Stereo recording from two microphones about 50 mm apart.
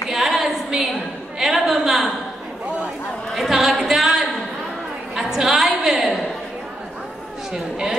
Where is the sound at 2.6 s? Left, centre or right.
Right.